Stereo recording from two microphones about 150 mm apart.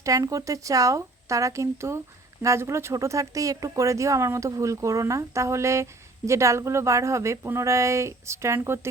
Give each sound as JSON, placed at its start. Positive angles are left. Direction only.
{"t": 0.0, "sound": "speech", "side_deg": -20}